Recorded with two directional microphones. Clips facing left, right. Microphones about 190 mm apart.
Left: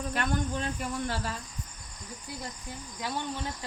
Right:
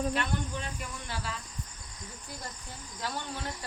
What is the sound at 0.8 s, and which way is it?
Speech, 45° left (ahead or behind).